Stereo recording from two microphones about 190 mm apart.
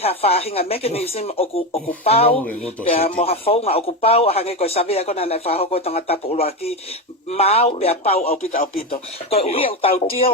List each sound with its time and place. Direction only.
0.0 s speech: 30° left (ahead or behind)
2.4 s speech: 5° left (ahead or behind)
2.9 s speech: 30° left (ahead or behind)